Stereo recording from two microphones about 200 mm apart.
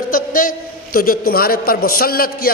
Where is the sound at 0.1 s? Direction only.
45° left (ahead or behind).